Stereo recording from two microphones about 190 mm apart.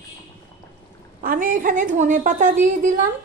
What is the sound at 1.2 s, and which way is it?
A woman's voice, 45° right (ahead or behind).